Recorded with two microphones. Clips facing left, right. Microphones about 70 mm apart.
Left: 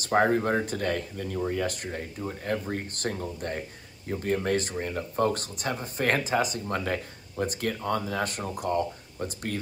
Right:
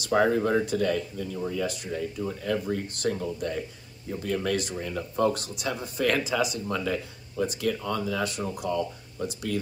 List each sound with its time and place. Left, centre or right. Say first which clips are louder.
0.0 s speech: even; left